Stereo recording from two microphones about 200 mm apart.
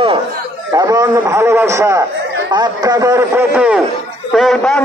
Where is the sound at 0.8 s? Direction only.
15° right (ahead or behind).